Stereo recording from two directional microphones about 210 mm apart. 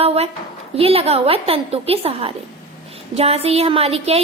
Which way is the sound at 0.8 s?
25° right (ahead or behind).